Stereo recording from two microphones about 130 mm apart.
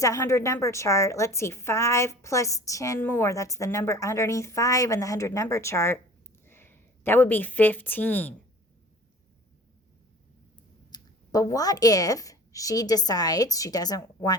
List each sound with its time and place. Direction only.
0.0 s a woman's voice: 25° left (ahead or behind)
10.9 s a woman's voice: 25° left (ahead or behind)